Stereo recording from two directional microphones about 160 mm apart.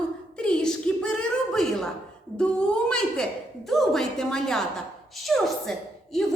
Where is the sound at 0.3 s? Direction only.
5° left (ahead or behind).